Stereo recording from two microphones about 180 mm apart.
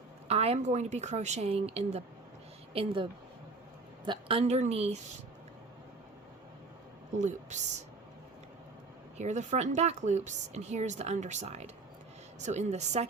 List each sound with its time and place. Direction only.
0.3 s speech: 35° right (ahead or behind)
7.2 s speech: 40° right (ahead or behind)
9.1 s speech: 40° right (ahead or behind)